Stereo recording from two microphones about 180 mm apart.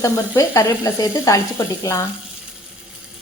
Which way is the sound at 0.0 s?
20° left (ahead or behind).